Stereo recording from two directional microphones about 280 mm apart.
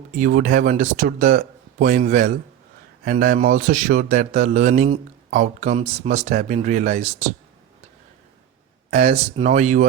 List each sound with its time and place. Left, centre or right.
0.2 s speech: right
8.9 s speech: right